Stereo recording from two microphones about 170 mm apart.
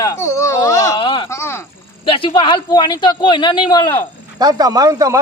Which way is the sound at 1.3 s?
15° left (ahead or behind).